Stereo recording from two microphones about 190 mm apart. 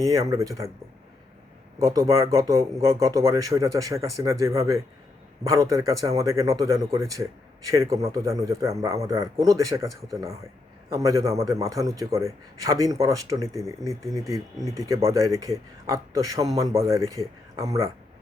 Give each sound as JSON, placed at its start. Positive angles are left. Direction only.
{"t": 0.0, "sound": "speech", "side_deg": -15}
{"t": 1.8, "sound": "speech", "side_deg": -15}